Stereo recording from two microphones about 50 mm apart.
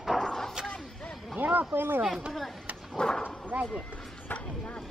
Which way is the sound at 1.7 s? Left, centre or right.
Right.